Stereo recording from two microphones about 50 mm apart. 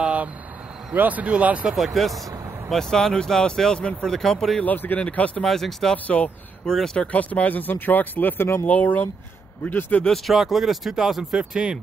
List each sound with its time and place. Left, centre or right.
0.0 s vehicle: right
0.9 s speech: right
2.0 s speech: centre
2.7 s speech: centre
4.6 s speech: left
4.9 s speech: left
5.4 s speech: centre
6.0 s speech: left
6.6 s speech: centre
7.1 s speech: left
8.4 s speech: left
8.6 s speech: left
10.0 s speech: centre
10.3 s speech: centre